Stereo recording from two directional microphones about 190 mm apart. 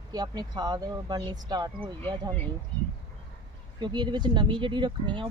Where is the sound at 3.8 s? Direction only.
25° right (ahead or behind).